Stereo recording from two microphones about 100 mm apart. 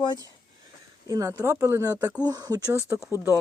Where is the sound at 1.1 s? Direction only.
35° right (ahead or behind).